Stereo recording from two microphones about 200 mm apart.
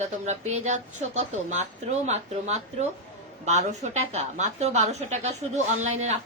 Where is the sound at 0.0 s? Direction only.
35° right (ahead or behind).